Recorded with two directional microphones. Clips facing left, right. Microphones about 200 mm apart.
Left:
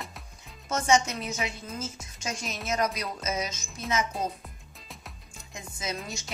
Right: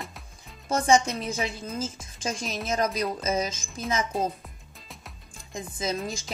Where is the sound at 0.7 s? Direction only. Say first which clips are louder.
Right 3 dB; 30° right (ahead or behind).